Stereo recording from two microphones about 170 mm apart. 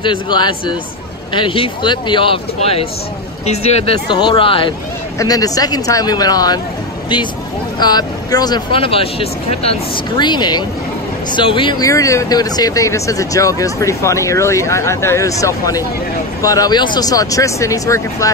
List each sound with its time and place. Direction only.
0.0 s speech: 25° left (ahead or behind)
7.8 s speech: 25° left (ahead or behind)